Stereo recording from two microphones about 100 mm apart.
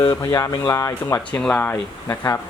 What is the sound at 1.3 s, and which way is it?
Speech, 10° left (ahead or behind).